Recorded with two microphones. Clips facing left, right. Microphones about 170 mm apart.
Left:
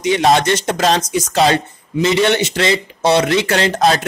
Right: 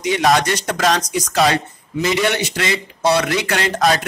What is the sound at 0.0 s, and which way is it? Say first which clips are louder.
Speech: left 3 dB; 25° left (ahead or behind).